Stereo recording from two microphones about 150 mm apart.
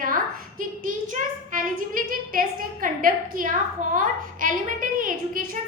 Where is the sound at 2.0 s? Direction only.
70° right (ahead or behind).